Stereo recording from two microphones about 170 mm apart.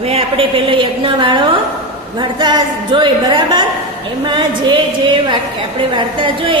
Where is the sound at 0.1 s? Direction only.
35° right (ahead or behind).